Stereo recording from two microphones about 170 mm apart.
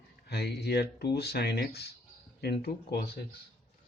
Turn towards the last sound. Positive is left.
turn(degrees=65)  # may be behind; listen again after turning